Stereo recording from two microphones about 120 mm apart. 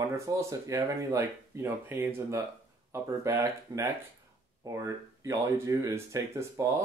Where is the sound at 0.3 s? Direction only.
25° right (ahead or behind).